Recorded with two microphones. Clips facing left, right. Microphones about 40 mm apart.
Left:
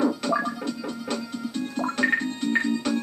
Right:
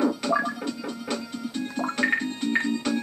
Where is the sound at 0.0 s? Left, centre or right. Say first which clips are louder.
Even; centre.